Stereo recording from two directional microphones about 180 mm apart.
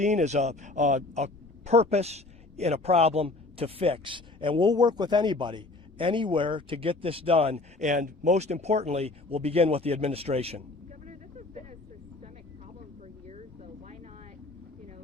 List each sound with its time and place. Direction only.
0.0 s speech: 40° right (ahead or behind)
11.0 s vehicle: 40° right (ahead or behind)
13.0 s a sound: 40° right (ahead or behind)